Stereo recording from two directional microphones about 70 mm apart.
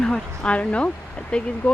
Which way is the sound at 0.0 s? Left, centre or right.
Centre.